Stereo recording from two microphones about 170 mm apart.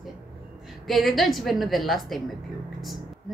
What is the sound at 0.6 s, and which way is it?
A woman's voice, centre (ahead or behind).